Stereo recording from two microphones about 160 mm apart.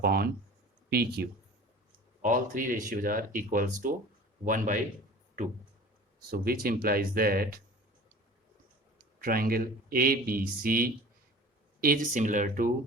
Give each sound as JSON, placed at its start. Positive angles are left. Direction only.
{"t": 0.0, "sound": "speech", "side_deg": -70}
{"t": 2.2, "sound": "speech", "side_deg": -55}
{"t": 6.3, "sound": "speech", "side_deg": -65}
{"t": 9.2, "sound": "speech", "side_deg": -65}